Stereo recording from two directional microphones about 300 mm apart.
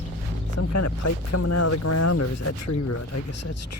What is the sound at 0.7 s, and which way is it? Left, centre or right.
Speech, left.